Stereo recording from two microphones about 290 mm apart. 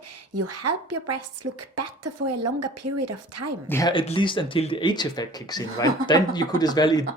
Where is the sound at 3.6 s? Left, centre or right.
Centre.